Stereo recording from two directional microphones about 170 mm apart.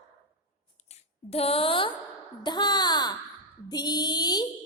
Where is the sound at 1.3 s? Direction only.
35° left (ahead or behind).